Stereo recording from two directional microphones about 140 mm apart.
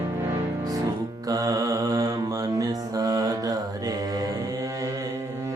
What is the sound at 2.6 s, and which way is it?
Music, 25° right (ahead or behind).